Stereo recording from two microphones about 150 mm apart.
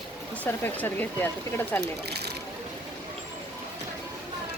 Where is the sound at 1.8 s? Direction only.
90° right.